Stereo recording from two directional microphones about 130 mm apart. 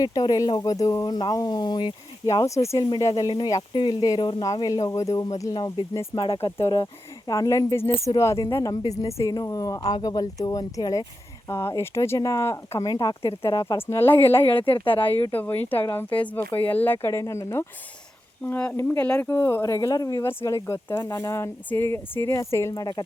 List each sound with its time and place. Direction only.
0.0 s speech: 30° left (ahead or behind)
13.7 s speech: 15° left (ahead or behind)
14.6 s a woman's voice: 40° left (ahead or behind)
15.0 s speech: 15° left (ahead or behind)
18.4 s speech: 10° left (ahead or behind); by 23.0 s 30° left (ahead or behind)